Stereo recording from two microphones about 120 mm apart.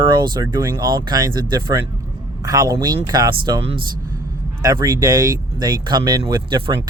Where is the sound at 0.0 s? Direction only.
40° right (ahead or behind).